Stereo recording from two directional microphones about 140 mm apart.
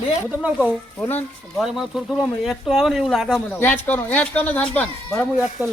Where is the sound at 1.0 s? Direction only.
15° left (ahead or behind).